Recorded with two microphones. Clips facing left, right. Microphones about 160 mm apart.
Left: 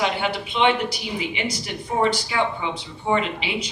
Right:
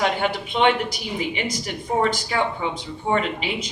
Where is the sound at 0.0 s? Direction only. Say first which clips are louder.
Right 1 dB; 45° right (ahead or behind).